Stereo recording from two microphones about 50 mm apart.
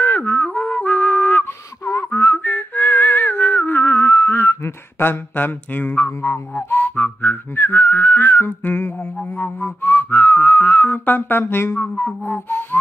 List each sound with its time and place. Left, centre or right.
0.0 s music: left
1.4 s a sound: left
2.0 s whistling: left
9.9 s speech: left
12.3 s speech: left